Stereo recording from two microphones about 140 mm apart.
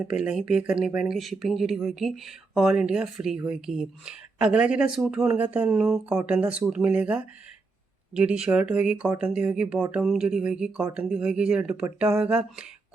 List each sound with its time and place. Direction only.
0.1 s speech: 5° right (ahead or behind)